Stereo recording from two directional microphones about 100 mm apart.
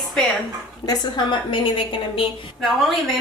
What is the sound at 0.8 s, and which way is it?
Speech, 50° left (ahead or behind).